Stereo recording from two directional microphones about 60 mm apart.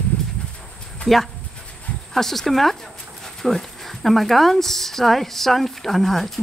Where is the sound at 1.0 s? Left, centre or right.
Centre.